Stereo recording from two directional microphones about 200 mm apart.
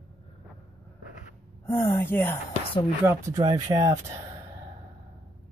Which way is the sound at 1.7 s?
10° left (ahead or behind).